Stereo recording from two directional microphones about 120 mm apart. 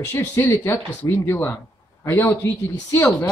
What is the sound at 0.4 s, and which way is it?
A woman's voice, 20° left (ahead or behind).